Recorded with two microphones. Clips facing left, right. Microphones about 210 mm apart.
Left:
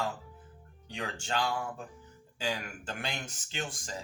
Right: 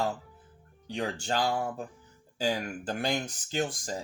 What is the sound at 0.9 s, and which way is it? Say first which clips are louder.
Speech: right 5 dB; 35° right (ahead or behind).